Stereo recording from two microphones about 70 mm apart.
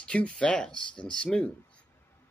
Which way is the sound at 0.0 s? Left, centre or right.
Centre.